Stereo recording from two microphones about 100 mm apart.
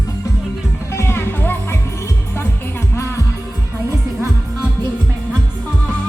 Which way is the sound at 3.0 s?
30° left (ahead or behind).